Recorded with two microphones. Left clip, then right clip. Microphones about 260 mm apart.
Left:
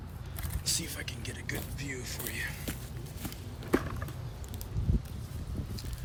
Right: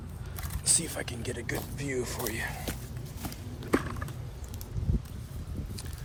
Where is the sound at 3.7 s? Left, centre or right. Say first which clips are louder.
Right 2 dB; right.